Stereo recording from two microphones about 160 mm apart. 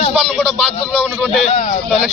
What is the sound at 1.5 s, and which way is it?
Speech, 50° left (ahead or behind).